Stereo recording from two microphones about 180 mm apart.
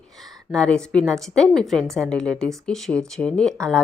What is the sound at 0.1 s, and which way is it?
A woman's voice, centre (ahead or behind).